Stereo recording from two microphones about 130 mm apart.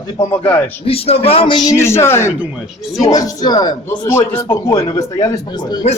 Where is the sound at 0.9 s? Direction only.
50° left (ahead or behind).